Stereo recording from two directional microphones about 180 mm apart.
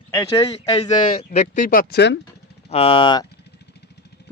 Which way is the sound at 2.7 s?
30° left (ahead or behind).